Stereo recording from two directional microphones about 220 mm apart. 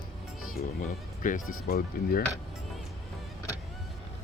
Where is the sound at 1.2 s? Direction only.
40° left (ahead or behind).